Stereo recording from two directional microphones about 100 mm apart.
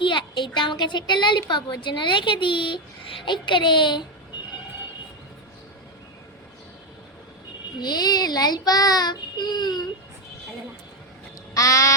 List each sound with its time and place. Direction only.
0.0 s a woman's voice: 55° left (ahead or behind)
7.8 s a woman's voice: 45° left (ahead or behind)
11.5 s a sound: 35° left (ahead or behind)